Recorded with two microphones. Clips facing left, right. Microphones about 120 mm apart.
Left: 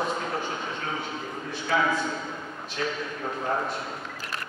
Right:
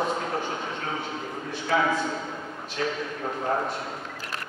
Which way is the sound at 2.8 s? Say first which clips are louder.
Right 2 dB; 45° right (ahead or behind).